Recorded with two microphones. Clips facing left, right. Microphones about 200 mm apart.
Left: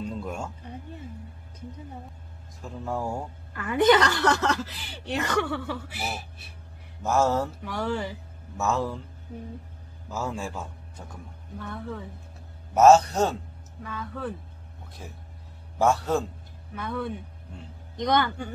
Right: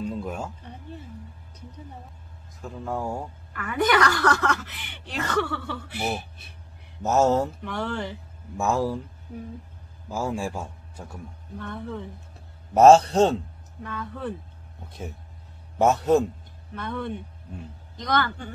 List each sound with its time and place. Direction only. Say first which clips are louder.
0.0 s a sound: right 2 dB; 5° right (ahead or behind)
2.6 s speech: right 1 dB; centre (ahead or behind)
3.5 s a woman's voice: left 3 dB; 25° left (ahead or behind)
5.1 s speech: even; 15° left (ahead or behind)
7.0 s a man's voice: right 3 dB; 20° right (ahead or behind)
7.6 s speech: left 1 dB; 5° left (ahead or behind)
8.5 s a man's voice: right 3 dB; 15° right (ahead or behind)
10.1 s a man's voice: right 4 dB; 10° right (ahead or behind)
11.6 s speech: right 2 dB; 5° left (ahead or behind)
12.7 s a man's voice: right 3 dB; 30° right (ahead or behind)
13.8 s speech: right 1 dB; centre (ahead or behind)
15.8 s a man's voice: right 4 dB; 20° right (ahead or behind)
16.7 s speech: even; 5° left (ahead or behind)
17.9 s speech: left 2 dB; 15° left (ahead or behind)